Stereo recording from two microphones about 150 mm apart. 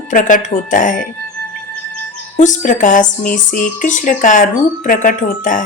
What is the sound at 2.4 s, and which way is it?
Speech, 55° left (ahead or behind).